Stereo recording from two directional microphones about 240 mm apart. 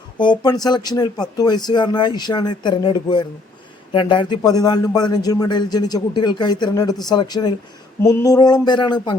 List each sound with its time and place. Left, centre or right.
0.2 s speech: centre